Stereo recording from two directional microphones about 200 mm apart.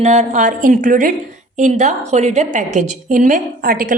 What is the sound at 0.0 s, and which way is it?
A woman's voice, 35° right (ahead or behind).